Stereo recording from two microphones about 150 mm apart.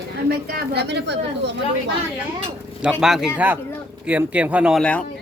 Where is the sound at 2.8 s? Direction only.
5° right (ahead or behind).